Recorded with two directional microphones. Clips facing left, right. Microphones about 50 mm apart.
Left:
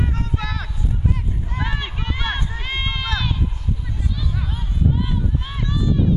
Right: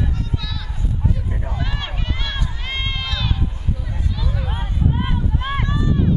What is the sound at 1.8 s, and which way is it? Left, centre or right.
Run, centre.